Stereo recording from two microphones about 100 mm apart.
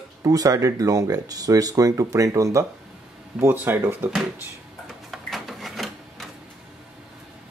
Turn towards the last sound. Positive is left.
turn(degrees=0)  # may be behind; listen again after turning